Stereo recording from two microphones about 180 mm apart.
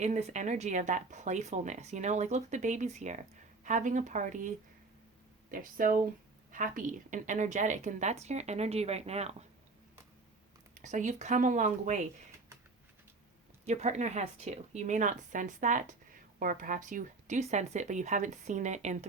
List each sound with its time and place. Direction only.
0.0 s speech: 40° right (ahead or behind)
10.8 s speech: 45° right (ahead or behind)
13.7 s speech: 40° right (ahead or behind)